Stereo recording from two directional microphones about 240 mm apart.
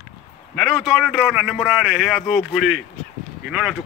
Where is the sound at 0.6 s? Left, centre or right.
Centre.